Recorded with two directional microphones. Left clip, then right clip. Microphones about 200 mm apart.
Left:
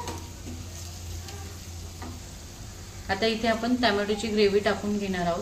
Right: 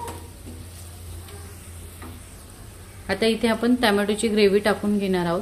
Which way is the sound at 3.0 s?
45° right (ahead or behind).